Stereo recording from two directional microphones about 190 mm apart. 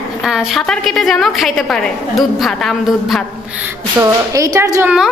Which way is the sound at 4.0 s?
15° right (ahead or behind).